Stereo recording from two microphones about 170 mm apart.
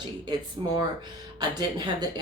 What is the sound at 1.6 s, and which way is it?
Speech, 25° right (ahead or behind).